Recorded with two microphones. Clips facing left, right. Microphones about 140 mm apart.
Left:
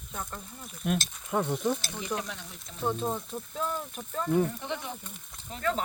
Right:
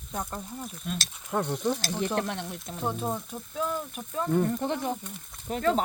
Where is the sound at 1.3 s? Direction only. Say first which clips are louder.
Even; centre (ahead or behind).